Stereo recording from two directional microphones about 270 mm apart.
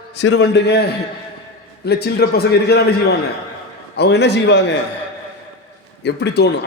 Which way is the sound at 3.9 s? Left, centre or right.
Left.